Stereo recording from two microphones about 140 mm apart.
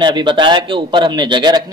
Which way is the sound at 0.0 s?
35° right (ahead or behind).